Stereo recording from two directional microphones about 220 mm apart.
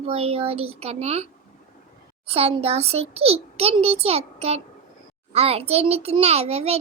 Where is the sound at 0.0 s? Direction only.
25° right (ahead or behind).